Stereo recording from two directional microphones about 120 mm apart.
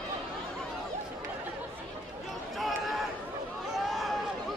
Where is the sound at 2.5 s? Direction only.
Centre (ahead or behind).